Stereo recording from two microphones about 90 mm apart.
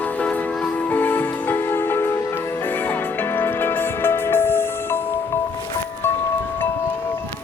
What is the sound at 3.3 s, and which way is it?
Music, 20° left (ahead or behind).